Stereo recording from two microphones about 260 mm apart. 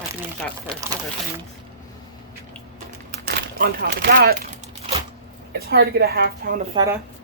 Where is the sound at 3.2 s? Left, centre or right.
Right.